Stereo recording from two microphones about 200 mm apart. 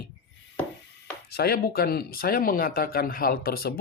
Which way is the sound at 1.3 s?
50° left (ahead or behind).